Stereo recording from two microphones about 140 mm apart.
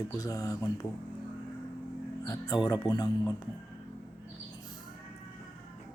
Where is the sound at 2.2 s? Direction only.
25° left (ahead or behind).